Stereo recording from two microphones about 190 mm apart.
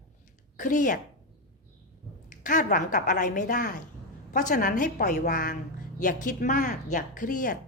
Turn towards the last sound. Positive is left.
turn(degrees=45)  # may be behind; listen again after turning